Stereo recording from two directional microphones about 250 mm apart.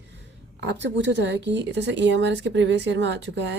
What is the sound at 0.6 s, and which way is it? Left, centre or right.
A woman's voice, right.